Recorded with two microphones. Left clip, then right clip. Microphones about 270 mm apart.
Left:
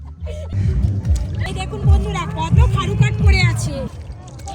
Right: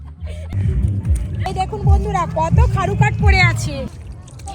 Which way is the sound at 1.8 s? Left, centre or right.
Centre.